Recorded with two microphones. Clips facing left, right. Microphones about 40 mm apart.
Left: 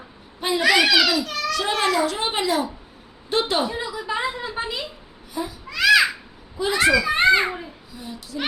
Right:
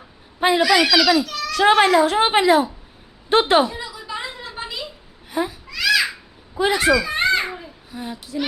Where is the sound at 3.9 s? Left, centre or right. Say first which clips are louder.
Left 5 dB; left.